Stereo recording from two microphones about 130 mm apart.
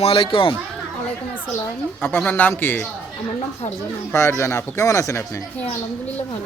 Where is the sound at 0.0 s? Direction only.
45° left (ahead or behind).